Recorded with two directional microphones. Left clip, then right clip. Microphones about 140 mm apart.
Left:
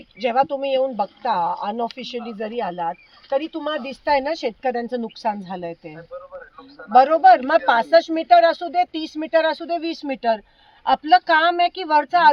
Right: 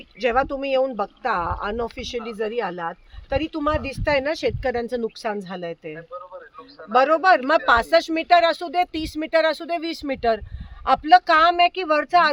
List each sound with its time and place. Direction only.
0.2 s speech: 20° right (ahead or behind)